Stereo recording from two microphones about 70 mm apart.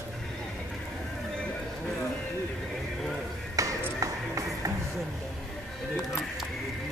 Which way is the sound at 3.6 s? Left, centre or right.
Right.